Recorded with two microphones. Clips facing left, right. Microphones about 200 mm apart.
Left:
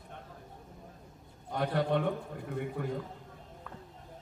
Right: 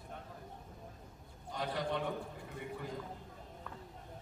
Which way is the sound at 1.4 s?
60° left (ahead or behind).